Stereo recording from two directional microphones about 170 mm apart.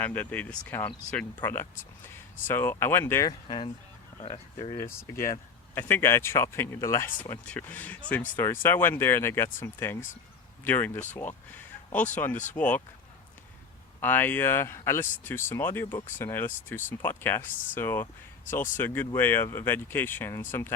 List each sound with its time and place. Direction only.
0.0 s speech: 10° left (ahead or behind)
4.2 s speech: 35° left (ahead or behind)
4.8 s speech: 15° left (ahead or behind)
14.0 s speech: 10° left (ahead or behind)